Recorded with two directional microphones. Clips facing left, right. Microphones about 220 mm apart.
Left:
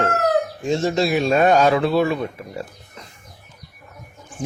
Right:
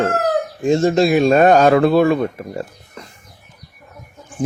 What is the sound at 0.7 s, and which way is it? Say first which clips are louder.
Speech: right 5 dB; 50° right (ahead or behind).